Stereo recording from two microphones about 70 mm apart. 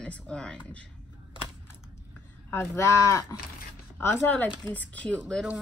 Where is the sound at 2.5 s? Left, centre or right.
Left.